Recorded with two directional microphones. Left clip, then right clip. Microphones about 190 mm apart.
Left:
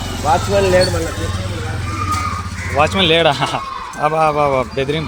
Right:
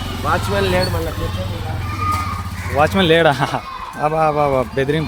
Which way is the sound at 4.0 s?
25° right (ahead or behind).